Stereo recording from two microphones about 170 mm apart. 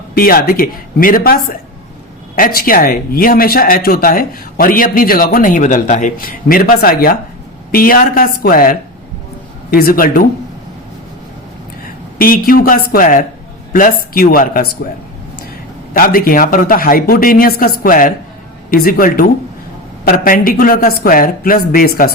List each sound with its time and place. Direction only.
0.1 s speech: 60° left (ahead or behind)
12.2 s speech: 60° left (ahead or behind)
15.9 s speech: 55° left (ahead or behind)